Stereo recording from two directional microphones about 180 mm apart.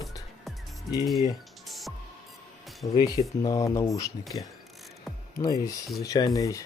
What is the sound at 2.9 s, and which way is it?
Speech, 25° left (ahead or behind).